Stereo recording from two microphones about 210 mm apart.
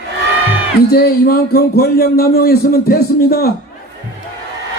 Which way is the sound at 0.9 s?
45° left (ahead or behind).